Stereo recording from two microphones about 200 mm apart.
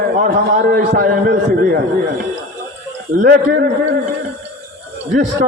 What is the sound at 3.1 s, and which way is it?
Speech, 50° right (ahead or behind).